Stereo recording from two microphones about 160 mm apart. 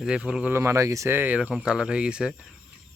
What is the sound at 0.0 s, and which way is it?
Speech, 5° right (ahead or behind).